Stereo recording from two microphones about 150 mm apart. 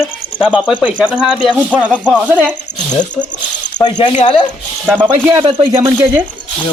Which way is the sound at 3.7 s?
30° left (ahead or behind).